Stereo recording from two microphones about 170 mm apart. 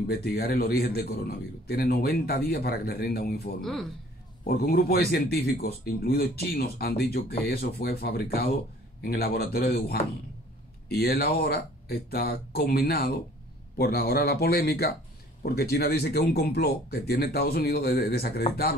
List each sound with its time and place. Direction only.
0.0 s a man's voice: 65° left (ahead or behind)